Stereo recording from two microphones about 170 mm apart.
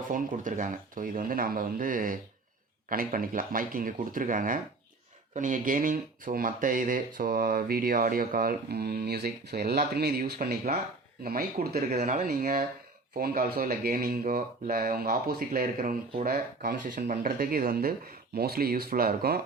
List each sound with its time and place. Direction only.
0.1 s speech: 50° right (ahead or behind)
11.9 s speech: 45° right (ahead or behind); by 19.4 s 60° right (ahead or behind)